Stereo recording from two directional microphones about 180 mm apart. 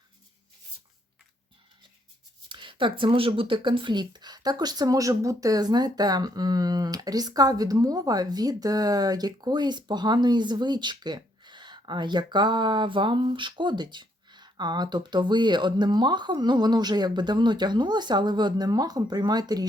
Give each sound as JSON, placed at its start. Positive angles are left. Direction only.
{"t": 2.5, "sound": "speech", "side_deg": -25}